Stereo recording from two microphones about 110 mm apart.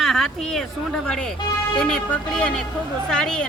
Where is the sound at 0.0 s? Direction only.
Centre (ahead or behind).